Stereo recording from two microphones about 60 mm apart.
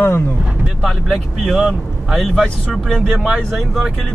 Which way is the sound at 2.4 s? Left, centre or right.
Centre.